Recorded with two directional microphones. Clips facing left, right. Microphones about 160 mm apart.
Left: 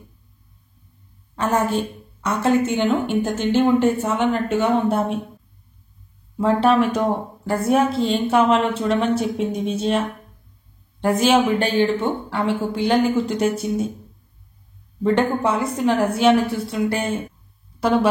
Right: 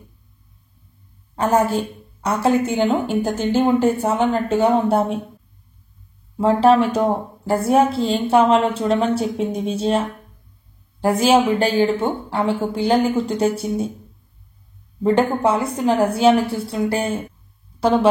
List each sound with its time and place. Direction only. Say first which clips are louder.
1.5 s a woman's voice: right 2 dB; 35° right (ahead or behind)
6.4 s a woman's voice: right 2 dB; 30° right (ahead or behind)
15.0 s a woman's voice: right 2 dB; 30° right (ahead or behind)